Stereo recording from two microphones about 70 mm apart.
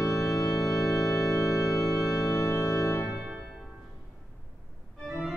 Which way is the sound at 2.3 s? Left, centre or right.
Left.